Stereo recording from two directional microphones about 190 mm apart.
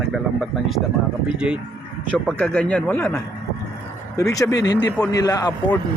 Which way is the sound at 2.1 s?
5° left (ahead or behind).